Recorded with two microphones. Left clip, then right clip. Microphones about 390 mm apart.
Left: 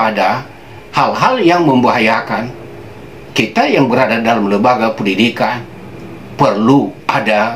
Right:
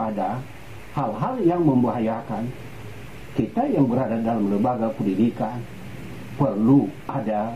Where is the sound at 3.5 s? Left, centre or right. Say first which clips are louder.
Left 10 dB; centre.